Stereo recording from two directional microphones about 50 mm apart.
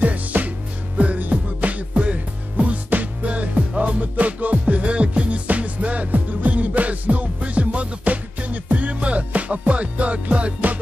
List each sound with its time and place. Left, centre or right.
0.0 s music: right